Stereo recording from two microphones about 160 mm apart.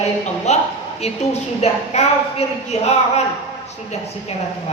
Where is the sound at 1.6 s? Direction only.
45° left (ahead or behind).